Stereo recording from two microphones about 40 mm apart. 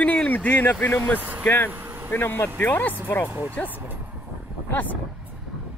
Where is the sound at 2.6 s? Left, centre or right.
Left.